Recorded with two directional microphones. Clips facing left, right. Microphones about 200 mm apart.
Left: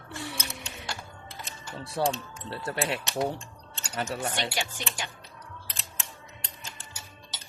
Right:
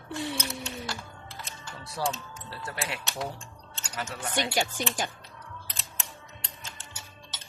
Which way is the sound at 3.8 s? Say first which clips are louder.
Left 5 dB; 30° left (ahead or behind).